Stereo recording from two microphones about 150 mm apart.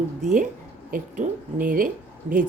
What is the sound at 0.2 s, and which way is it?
A woman's voice, 55° right (ahead or behind).